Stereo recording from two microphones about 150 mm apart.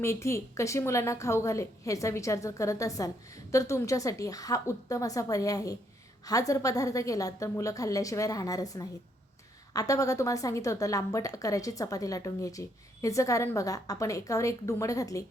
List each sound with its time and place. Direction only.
0.0 s a woman's voice: 20° left (ahead or behind)